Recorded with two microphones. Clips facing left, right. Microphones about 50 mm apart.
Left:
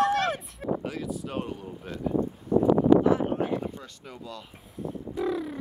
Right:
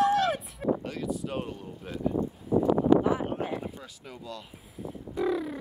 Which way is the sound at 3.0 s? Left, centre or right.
Centre.